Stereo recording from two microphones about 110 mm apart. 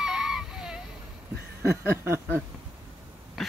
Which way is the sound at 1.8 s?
25° right (ahead or behind).